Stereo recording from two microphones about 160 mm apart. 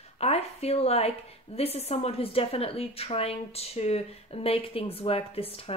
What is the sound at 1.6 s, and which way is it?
A woman's voice, 40° left (ahead or behind).